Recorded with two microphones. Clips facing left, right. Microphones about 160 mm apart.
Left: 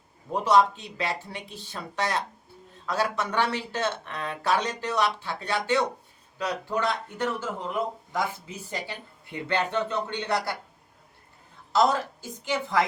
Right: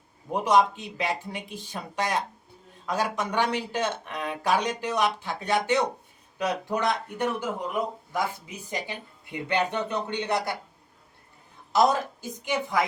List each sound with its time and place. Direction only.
0.3 s speech: 15° right (ahead or behind)
11.7 s speech: 15° right (ahead or behind)